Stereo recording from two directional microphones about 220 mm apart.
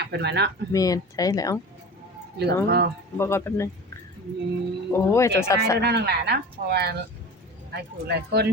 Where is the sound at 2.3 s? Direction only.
50° right (ahead or behind).